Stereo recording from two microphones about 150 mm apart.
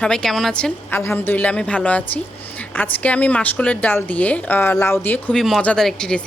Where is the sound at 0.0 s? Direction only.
5° left (ahead or behind).